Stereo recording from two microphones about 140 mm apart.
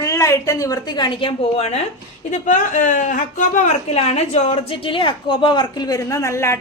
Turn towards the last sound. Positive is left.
turn(degrees=20)  # may be behind; listen again after turning